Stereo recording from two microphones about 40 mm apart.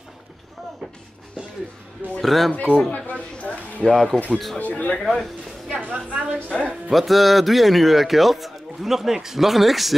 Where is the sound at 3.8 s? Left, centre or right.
Centre.